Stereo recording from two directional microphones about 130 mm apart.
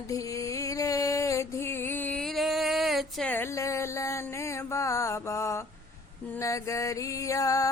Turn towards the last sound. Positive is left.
turn(degrees=25)  # may be behind; listen again after turning